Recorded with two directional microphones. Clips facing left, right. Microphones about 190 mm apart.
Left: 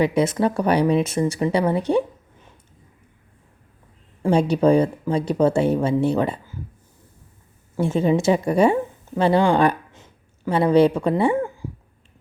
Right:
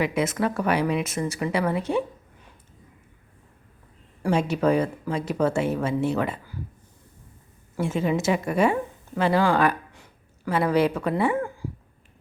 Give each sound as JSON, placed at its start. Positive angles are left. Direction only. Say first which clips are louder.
{"t": 0.0, "sound": "speech", "louder": "left 5 dB", "side_deg": 30}
{"t": 4.2, "sound": "speech", "louder": "left 5 dB", "side_deg": 30}
{"t": 7.8, "sound": "a woman's voice", "louder": "left 5 dB", "side_deg": 30}